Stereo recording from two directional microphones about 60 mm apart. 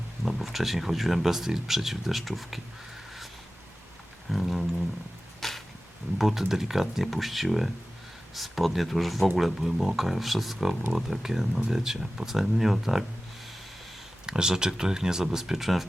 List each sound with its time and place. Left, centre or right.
0.3 s speech: centre
4.3 s speech: centre
5.4 s a sound: centre
6.1 s speech: centre
14.3 s speech: centre